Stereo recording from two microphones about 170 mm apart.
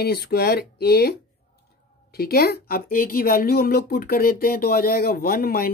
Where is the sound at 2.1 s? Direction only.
65° left (ahead or behind).